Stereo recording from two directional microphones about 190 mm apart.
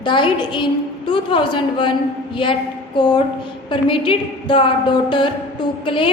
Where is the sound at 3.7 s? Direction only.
25° left (ahead or behind).